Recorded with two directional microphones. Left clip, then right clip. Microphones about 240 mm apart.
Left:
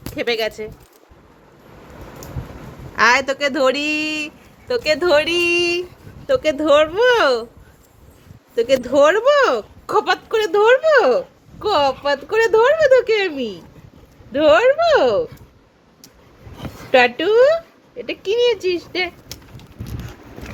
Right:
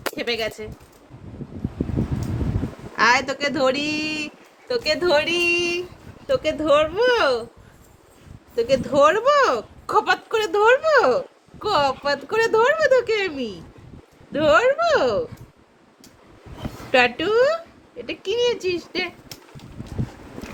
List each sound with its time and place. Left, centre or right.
0.2 s speech: left
2.9 s speech: centre
8.5 s speech: left
13.3 s speech: centre
14.3 s speech: centre
16.9 s speech: centre